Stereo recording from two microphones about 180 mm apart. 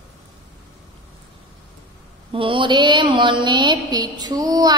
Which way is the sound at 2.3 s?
30° right (ahead or behind).